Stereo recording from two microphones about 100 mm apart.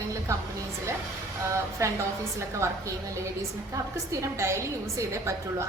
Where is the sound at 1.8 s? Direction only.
30° right (ahead or behind).